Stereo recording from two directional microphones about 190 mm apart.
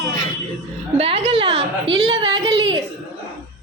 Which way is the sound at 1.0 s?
30° right (ahead or behind).